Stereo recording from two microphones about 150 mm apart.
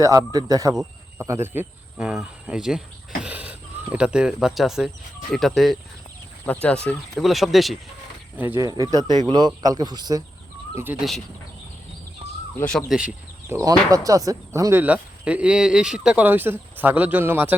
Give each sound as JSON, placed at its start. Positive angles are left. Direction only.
{"t": 0.0, "sound": "speech", "side_deg": -25}
{"t": 2.0, "sound": "speech", "side_deg": -5}
{"t": 8.5, "sound": "speech", "side_deg": -25}
{"t": 10.9, "sound": "speech", "side_deg": -10}
{"t": 12.5, "sound": "speech", "side_deg": 5}
{"t": 13.5, "sound": "speech", "side_deg": -20}